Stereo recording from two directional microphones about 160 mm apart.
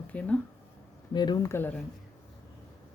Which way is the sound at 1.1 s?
25° left (ahead or behind).